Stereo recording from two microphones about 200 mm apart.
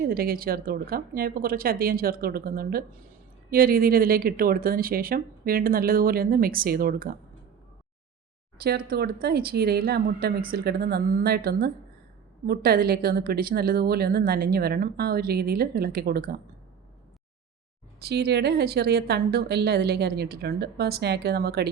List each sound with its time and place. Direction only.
0.0 s a woman's voice: 50° right (ahead or behind)
8.6 s a woman's voice: 50° right (ahead or behind)
18.0 s a woman's voice: 55° right (ahead or behind)